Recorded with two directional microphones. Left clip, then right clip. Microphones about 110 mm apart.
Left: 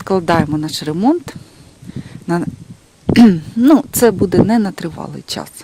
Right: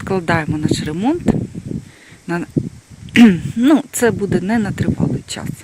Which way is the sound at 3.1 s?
25° left (ahead or behind).